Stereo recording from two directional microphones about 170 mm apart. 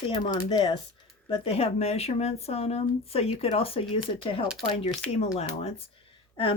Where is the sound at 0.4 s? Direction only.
30° left (ahead or behind).